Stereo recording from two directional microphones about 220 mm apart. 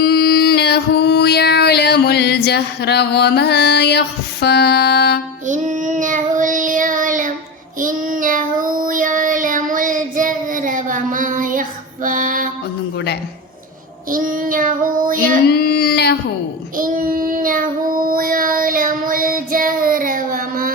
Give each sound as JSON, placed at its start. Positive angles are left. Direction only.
{"t": 0.0, "sound": "a sound", "side_deg": 45}
{"t": 5.5, "sound": "child singing", "side_deg": -35}
{"t": 12.0, "sound": "female singing", "side_deg": -40}
{"t": 14.1, "sound": "child singing", "side_deg": -40}
{"t": 15.4, "sound": "a sound", "side_deg": 45}
{"t": 16.7, "sound": "child singing", "side_deg": -40}